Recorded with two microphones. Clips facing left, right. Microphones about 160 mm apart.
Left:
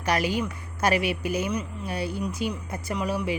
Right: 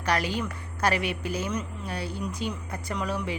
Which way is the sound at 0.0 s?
10° left (ahead or behind).